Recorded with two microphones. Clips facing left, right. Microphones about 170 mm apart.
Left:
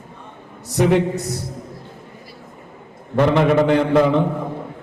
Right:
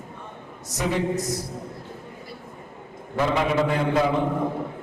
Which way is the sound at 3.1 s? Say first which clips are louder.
Left 7 dB; 65° left (ahead or behind).